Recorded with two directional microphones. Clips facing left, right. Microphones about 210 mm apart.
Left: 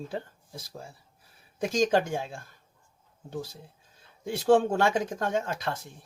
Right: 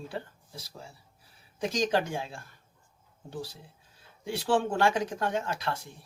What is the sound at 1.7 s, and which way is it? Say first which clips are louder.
Speech: left 4 dB; 50° left (ahead or behind).